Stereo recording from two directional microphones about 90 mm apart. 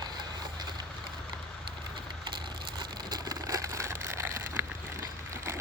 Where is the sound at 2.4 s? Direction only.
55° right (ahead or behind); by 4.3 s 30° right (ahead or behind).